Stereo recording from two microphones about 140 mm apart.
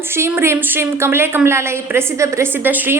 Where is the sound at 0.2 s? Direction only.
15° right (ahead or behind).